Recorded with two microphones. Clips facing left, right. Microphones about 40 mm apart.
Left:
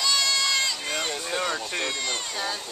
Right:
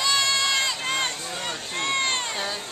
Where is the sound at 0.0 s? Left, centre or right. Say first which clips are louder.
Right 2 dB; right.